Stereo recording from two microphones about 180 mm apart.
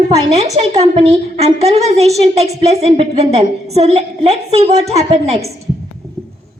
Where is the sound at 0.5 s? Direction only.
35° right (ahead or behind).